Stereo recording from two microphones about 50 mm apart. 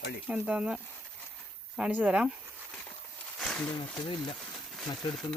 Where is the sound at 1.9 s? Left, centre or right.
Right.